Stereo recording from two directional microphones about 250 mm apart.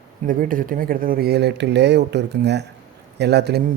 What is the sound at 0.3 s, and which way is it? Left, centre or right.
Speech, right.